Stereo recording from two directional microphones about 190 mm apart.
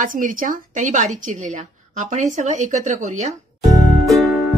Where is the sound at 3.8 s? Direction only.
Centre (ahead or behind).